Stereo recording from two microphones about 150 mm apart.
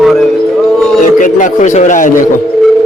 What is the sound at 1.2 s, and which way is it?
A man's voice, 60° left (ahead or behind).